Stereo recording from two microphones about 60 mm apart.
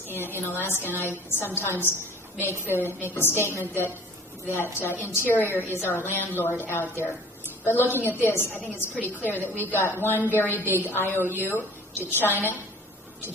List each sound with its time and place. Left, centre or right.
0.1 s a woman's voice: left
7.9 s a woman's voice: left
8.5 s a woman's voice: left
9.0 s a woman's voice: left